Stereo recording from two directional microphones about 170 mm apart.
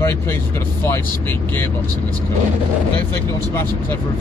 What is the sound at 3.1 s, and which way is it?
Speech, 15° left (ahead or behind).